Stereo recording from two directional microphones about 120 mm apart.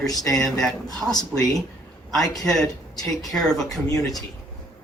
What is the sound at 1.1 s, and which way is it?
Speech, 35° left (ahead or behind).